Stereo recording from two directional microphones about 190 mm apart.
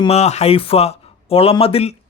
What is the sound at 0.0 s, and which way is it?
Speech, 35° left (ahead or behind).